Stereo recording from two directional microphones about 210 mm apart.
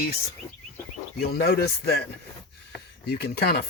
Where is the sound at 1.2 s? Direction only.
50° left (ahead or behind).